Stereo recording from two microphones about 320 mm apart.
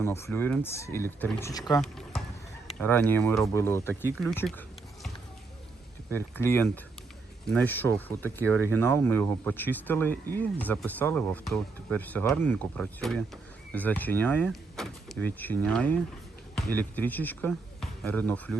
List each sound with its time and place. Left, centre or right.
0.0 s speech: centre
6.1 s speech: centre
8.7 s speech: right
9.3 s speech: centre